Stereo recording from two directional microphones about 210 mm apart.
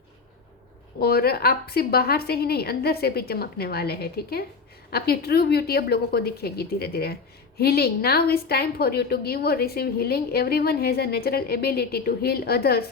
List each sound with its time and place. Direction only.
0.9 s a woman's voice: 45° left (ahead or behind)